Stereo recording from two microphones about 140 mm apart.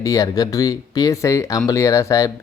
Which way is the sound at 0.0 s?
25° left (ahead or behind).